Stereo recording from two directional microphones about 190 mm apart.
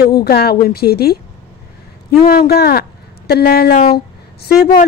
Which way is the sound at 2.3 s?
55° left (ahead or behind).